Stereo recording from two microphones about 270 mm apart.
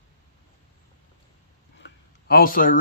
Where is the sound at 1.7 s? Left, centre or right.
Left.